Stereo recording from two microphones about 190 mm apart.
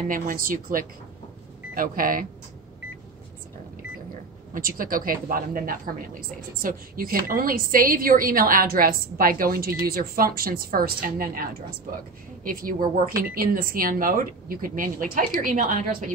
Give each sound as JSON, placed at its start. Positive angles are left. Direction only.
{"t": 0.1, "sound": "a woman's voice", "side_deg": -45}
{"t": 4.6, "sound": "a woman's voice", "side_deg": -50}